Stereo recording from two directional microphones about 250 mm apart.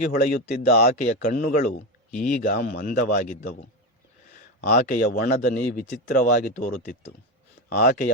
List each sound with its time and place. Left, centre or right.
0.0 s speech: left